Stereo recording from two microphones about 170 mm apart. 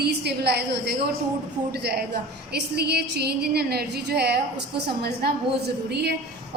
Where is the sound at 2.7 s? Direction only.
70° right (ahead or behind).